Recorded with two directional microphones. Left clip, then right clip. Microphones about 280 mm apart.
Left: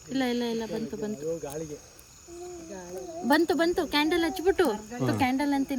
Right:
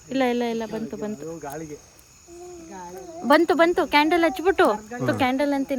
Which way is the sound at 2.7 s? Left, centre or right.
Centre.